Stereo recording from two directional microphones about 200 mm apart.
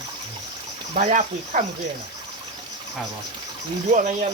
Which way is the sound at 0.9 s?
35° right (ahead or behind).